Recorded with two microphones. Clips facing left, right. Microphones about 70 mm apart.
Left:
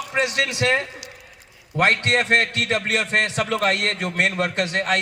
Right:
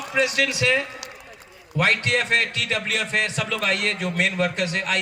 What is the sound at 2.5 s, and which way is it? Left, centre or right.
A man's voice, left.